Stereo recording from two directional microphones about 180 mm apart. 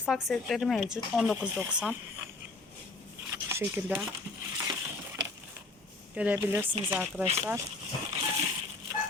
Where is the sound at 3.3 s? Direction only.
15° right (ahead or behind).